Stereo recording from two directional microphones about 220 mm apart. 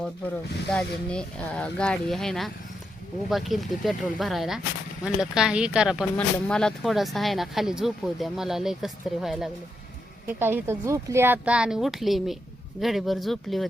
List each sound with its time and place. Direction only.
0.7 s speech: 5° left (ahead or behind)